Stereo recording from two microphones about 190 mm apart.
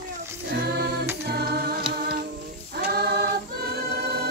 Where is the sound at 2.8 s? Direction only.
55° right (ahead or behind).